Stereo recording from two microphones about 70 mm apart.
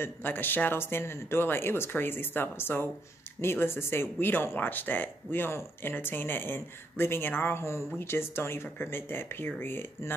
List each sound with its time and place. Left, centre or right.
0.0 s speech: left